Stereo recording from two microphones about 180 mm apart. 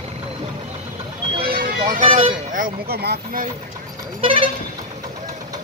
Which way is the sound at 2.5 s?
55° right (ahead or behind).